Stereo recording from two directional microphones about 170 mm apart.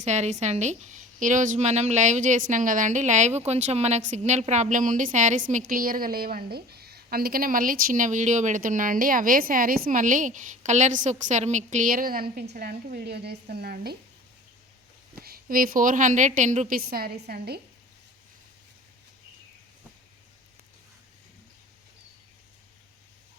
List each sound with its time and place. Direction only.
0.0 s a woman's voice: 40° right (ahead or behind); by 13.9 s 65° right (ahead or behind)
15.1 s a woman's voice: 60° right (ahead or behind)